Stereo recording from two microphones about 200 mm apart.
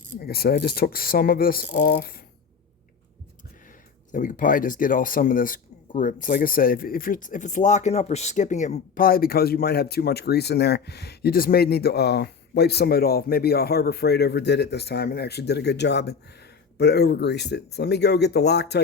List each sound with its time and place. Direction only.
0.3 s speech: 50° left (ahead or behind)
4.1 s speech: 40° left (ahead or behind); by 18.8 s 55° left (ahead or behind)